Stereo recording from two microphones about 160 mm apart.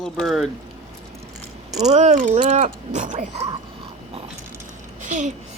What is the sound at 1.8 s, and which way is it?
Speech, 45° right (ahead or behind).